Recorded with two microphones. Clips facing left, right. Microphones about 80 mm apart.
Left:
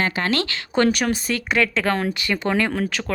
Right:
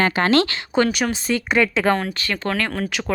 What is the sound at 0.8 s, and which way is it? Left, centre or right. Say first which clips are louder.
A woman's voice: even; centre.